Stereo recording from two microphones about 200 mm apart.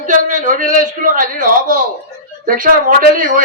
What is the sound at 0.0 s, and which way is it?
A man's voice, 40° right (ahead or behind).